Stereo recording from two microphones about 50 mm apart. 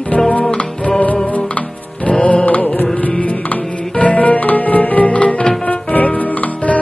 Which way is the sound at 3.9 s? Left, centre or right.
Left.